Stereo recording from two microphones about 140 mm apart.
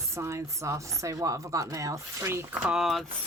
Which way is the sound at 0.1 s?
20° right (ahead or behind).